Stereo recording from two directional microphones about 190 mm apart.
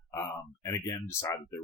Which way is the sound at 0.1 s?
15° left (ahead or behind).